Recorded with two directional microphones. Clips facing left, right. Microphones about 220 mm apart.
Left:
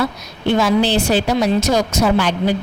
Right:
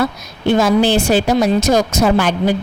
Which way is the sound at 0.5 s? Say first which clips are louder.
Right 2 dB; 50° right (ahead or behind).